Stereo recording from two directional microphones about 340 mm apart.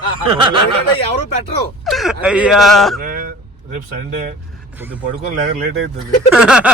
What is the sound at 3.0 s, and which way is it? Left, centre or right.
Speech, right.